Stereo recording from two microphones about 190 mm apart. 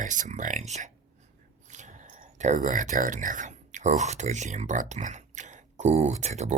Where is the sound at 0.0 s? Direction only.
45° right (ahead or behind).